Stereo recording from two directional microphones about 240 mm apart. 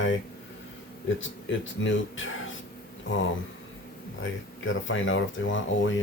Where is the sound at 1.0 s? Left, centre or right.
Left.